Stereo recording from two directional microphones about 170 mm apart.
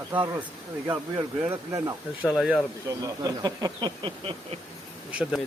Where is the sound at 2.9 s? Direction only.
20° right (ahead or behind).